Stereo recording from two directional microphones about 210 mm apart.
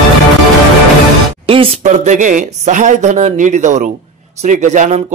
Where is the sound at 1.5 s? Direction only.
30° right (ahead or behind).